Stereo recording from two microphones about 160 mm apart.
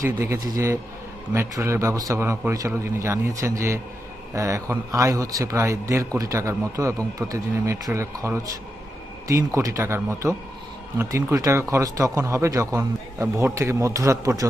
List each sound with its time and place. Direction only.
0.0 s a man's voice: 20° right (ahead or behind)